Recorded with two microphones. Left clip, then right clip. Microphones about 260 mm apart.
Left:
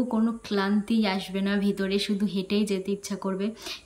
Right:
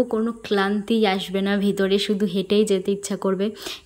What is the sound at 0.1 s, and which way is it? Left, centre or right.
A woman's voice, centre.